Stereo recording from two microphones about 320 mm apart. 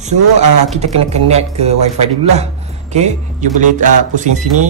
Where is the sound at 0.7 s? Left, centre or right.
Centre.